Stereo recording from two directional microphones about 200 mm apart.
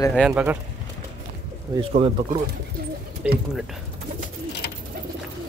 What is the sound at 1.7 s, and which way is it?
Speech, 25° right (ahead or behind).